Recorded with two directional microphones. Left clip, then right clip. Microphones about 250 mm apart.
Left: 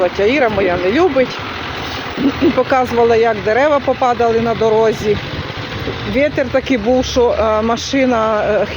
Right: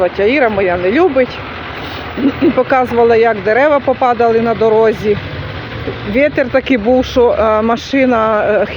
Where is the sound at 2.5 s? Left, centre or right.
Centre.